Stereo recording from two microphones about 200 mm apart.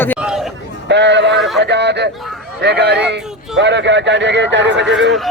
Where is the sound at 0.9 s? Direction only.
60° right (ahead or behind).